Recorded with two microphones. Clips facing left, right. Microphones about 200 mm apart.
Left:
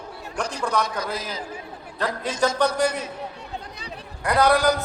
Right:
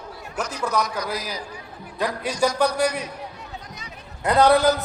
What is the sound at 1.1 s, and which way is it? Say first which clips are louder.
Speech: right 1 dB; 25° left (ahead or behind).